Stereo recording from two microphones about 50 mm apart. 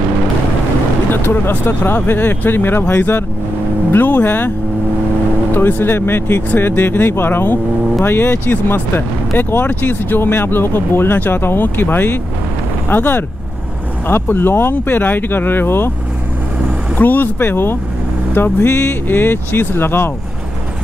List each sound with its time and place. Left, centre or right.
1.1 s speech: left
3.9 s speech: left
5.5 s speech: left
17.0 s speech: left
19.0 s speech: left